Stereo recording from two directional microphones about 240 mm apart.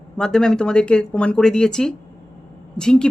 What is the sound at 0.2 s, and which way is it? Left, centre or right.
A woman's voice, centre.